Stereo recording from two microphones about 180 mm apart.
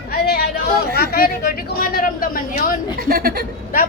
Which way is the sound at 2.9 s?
55° right (ahead or behind).